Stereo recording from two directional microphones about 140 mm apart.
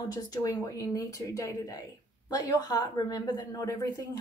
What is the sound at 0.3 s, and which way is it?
Speech, 25° left (ahead or behind).